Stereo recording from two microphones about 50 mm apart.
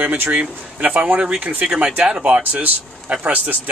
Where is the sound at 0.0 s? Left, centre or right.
Right.